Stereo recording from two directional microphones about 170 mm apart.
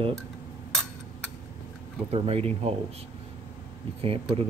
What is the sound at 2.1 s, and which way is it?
Speech, 35° right (ahead or behind).